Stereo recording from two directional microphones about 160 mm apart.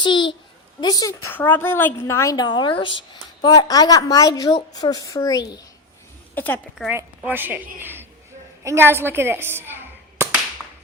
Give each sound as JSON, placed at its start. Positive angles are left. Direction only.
{"t": 0.0, "sound": "a woman's voice", "side_deg": 30}
{"t": 6.3, "sound": "a woman's voice", "side_deg": 10}
{"t": 6.8, "sound": "a woman's voice", "side_deg": 0}